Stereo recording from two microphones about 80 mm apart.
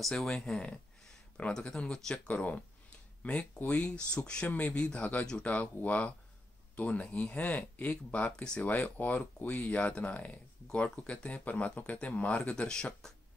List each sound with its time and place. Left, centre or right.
0.2 s speech: centre
2.1 s speech: centre